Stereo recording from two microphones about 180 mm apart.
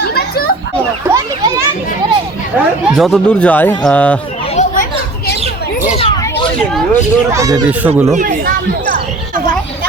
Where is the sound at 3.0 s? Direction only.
Centre (ahead or behind).